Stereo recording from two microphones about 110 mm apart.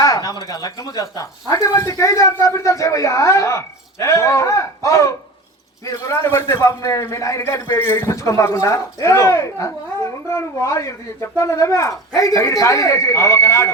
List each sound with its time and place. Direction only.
0.0 s a man's voice: 35° left (ahead or behind)